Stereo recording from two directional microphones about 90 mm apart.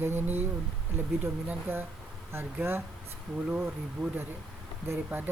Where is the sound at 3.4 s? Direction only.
15° right (ahead or behind).